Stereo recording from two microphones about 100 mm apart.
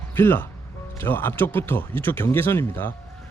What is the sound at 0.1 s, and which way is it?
Speech, 20° left (ahead or behind).